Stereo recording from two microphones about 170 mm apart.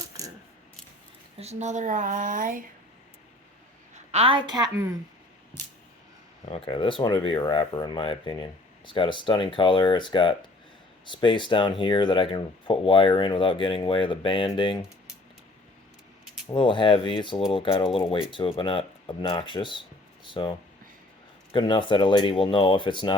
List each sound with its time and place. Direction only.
1.4 s speech: 40° right (ahead or behind)
3.9 s a woman's voice: 40° right (ahead or behind)
4.7 s speech: 15° right (ahead or behind)
6.5 s speech: 30° left (ahead or behind)
16.5 s speech: 30° left (ahead or behind)